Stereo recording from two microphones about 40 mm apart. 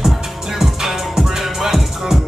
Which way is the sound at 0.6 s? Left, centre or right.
Centre.